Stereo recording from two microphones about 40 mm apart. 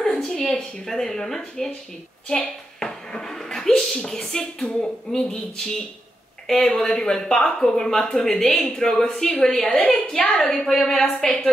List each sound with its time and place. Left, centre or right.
0.0 s a woman's voice: centre
11.2 s a woman's voice: centre